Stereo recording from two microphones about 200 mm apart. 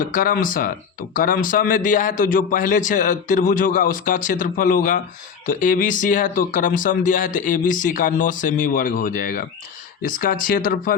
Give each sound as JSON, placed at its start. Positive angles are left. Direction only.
{"t": 0.0, "sound": "speech", "side_deg": 45}